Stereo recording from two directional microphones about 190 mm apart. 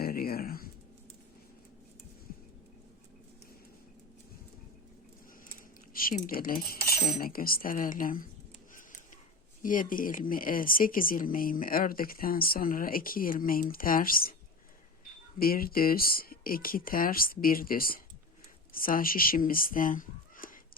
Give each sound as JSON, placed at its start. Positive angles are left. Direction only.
{"t": 0.0, "sound": "a sound", "side_deg": 50}
{"t": 5.9, "sound": "speech", "side_deg": 50}
{"t": 9.6, "sound": "speech", "side_deg": 45}
{"t": 15.4, "sound": "speech", "side_deg": 50}